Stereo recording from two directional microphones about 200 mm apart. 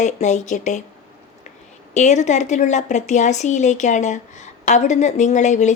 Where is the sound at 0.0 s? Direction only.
35° left (ahead or behind).